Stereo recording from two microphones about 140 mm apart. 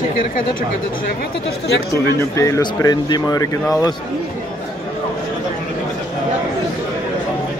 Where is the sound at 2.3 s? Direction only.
20° left (ahead or behind).